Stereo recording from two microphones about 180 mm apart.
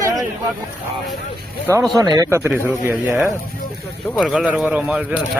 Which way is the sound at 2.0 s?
20° right (ahead or behind).